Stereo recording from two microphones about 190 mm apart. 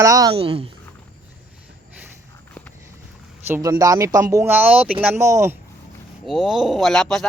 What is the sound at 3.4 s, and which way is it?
Speech, 10° right (ahead or behind).